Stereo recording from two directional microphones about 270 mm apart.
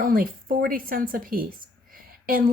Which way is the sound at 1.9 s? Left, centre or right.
Right.